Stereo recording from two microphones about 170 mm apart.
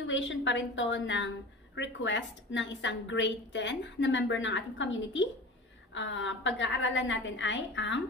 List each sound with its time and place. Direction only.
0.0 s a woman's voice: 90° left